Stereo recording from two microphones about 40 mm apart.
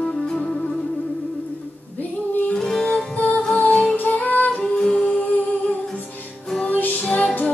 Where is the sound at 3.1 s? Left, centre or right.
Left.